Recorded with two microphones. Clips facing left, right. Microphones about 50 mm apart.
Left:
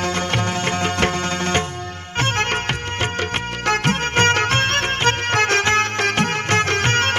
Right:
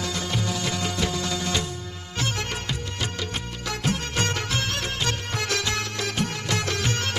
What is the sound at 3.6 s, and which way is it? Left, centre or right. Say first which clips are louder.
Music: left 9 dB; left.